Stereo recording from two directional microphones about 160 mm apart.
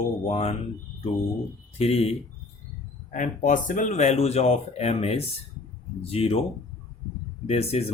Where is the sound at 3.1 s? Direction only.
55° left (ahead or behind); by 6.4 s 35° left (ahead or behind).